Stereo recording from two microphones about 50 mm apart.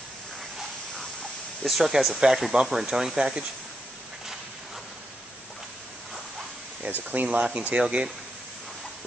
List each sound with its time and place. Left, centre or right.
1.6 s speech: centre
7.1 s speech: right